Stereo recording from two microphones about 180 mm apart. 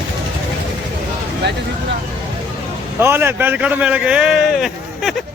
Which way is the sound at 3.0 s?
10° right (ahead or behind).